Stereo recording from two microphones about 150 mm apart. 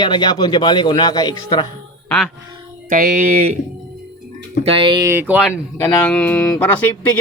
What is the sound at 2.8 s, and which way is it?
Speech, 65° right (ahead or behind).